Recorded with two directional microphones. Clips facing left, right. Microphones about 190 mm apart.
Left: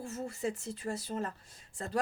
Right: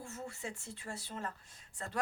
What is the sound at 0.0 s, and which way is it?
Speech, 40° left (ahead or behind).